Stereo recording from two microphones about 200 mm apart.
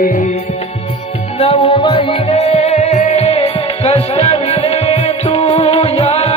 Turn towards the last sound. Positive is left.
turn(degrees=30)  # may be behind; listen again after turning